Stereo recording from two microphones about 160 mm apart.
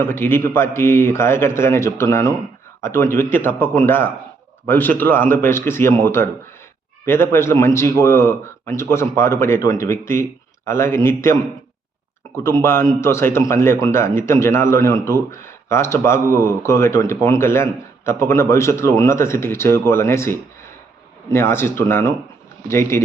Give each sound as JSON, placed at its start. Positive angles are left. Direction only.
{"t": 0.0, "sound": "a man's voice", "side_deg": 15}
{"t": 12.3, "sound": "a man's voice", "side_deg": 15}